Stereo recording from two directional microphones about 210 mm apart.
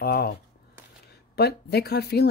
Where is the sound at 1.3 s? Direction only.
50° left (ahead or behind).